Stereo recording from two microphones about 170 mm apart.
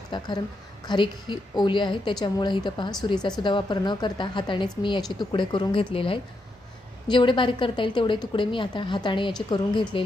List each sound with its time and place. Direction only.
0.1 s a woman's voice: 25° left (ahead or behind)